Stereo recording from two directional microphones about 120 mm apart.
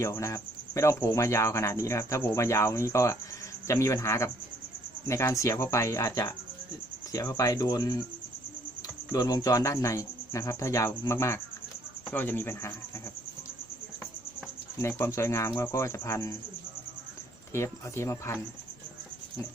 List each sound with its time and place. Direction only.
0.0 s speech: 25° left (ahead or behind)
9.1 s speech: 30° left (ahead or behind)
14.8 s speech: 20° left (ahead or behind)
17.5 s speech: 25° left (ahead or behind)